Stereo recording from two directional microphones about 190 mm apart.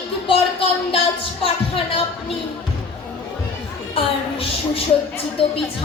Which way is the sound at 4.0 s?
30° left (ahead or behind).